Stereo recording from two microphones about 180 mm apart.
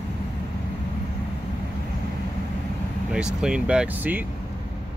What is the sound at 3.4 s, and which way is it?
Speech, 5° right (ahead or behind).